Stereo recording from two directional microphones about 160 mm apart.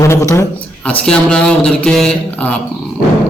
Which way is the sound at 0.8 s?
5° left (ahead or behind).